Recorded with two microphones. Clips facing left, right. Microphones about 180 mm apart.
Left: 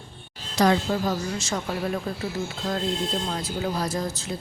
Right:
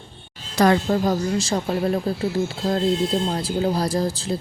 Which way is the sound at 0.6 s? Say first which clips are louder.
Right 3 dB; 55° right (ahead or behind).